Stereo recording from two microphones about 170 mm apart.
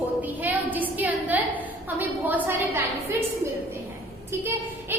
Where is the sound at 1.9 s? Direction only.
10° right (ahead or behind).